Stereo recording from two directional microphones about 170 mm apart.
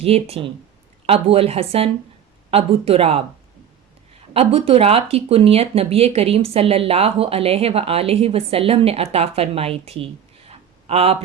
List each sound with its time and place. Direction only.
0.0 s speech: 35° right (ahead or behind)
4.4 s speech: 35° right (ahead or behind)
10.5 s a sound: 35° right (ahead or behind)